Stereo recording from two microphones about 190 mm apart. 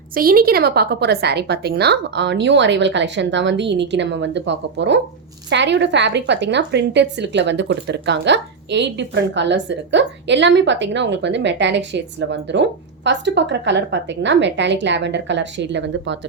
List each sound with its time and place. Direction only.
0.1 s a woman's voice: 50° right (ahead or behind); by 16.1 s 70° right (ahead or behind)